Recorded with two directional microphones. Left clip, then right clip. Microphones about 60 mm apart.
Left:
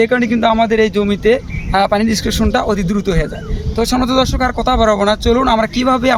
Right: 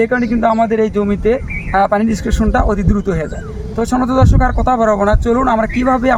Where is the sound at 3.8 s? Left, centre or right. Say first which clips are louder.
Left 1 dB; centre.